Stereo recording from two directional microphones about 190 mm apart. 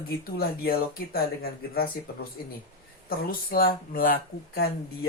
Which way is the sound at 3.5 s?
50° left (ahead or behind).